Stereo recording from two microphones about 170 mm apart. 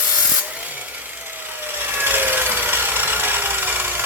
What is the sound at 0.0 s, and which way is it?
Wood, 10° right (ahead or behind).